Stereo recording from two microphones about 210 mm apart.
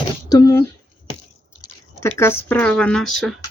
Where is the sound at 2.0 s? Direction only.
10° left (ahead or behind).